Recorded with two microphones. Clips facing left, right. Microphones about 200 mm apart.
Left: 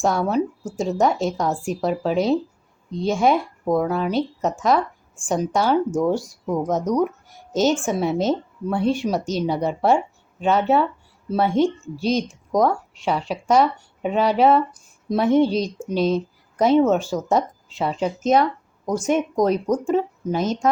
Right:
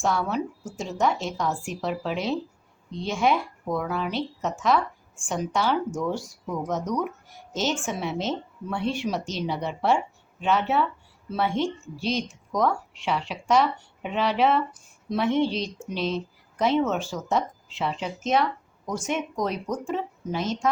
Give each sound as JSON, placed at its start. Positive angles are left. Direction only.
{"t": 0.0, "sound": "a woman's voice", "side_deg": 40}